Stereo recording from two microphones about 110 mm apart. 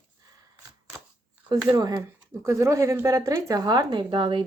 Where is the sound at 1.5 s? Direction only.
40° right (ahead or behind).